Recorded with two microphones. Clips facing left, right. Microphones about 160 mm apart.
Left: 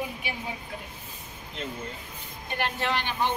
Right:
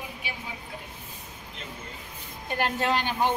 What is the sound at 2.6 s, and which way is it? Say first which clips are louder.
Speech: right 3 dB; 40° right (ahead or behind).